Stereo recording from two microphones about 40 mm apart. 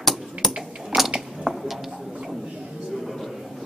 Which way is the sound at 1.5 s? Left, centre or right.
Centre.